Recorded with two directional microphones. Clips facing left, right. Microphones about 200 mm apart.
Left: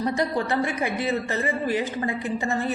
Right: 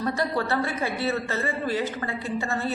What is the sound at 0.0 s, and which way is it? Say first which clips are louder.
A woman's voice: left 2 dB; 15° left (ahead or behind).